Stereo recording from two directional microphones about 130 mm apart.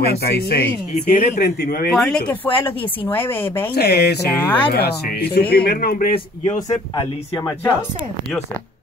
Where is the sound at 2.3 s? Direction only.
15° left (ahead or behind).